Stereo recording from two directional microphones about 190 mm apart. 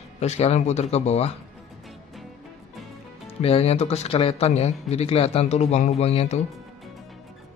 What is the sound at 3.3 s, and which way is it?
Speech, 30° left (ahead or behind).